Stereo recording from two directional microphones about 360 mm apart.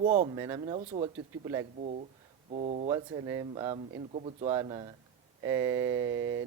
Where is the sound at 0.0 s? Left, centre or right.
Centre.